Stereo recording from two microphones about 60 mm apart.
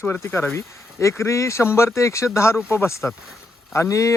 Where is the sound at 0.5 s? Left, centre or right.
Left.